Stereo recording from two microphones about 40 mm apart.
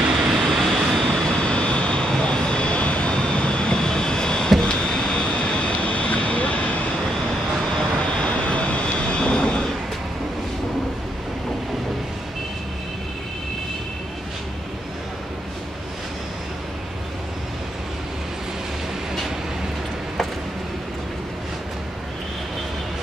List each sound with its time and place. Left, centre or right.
0.1 s vehicle: centre
0.6 s vehicle: centre
1.4 s vehicle: left
4.5 s a sound: centre
5.8 s vehicle: left
8.2 s vehicle: left